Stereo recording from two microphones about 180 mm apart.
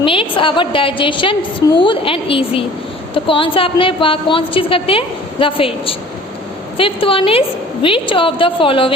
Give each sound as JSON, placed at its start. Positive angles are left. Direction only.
{"t": 0.0, "sound": "a woman's voice", "side_deg": 30}